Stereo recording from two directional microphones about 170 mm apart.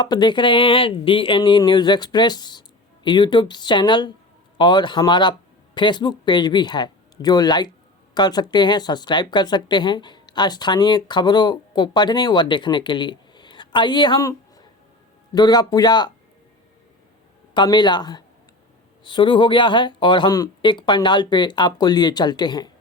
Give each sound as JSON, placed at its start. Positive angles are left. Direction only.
{"t": 0.0, "sound": "speech", "side_deg": 25}
{"t": 17.5, "sound": "speech", "side_deg": 25}